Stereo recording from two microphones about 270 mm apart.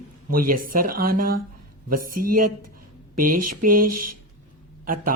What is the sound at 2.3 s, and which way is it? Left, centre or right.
Speech, right.